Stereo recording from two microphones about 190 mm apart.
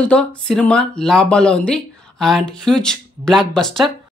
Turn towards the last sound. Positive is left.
turn(degrees=0)  # may be behind; listen again after turning